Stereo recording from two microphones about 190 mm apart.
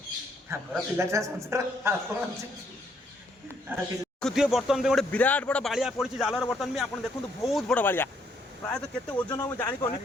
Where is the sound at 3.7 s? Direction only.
10° right (ahead or behind); by 8.1 s 10° left (ahead or behind).